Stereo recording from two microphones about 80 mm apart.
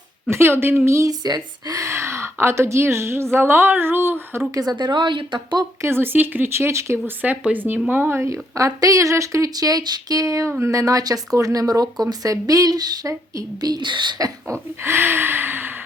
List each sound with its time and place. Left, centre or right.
0.3 s speech: right
1.2 s speech: right
1.8 s a woman's voice: right
4.5 s speech: right
5.8 s speech: right
7.2 s gasp: centre
7.9 s speech: right
13.7 s speech: right
14.8 s gasp: right